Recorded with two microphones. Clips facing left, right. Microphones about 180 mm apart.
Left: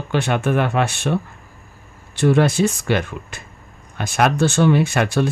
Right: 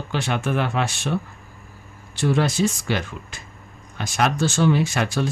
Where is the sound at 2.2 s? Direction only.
60° left (ahead or behind).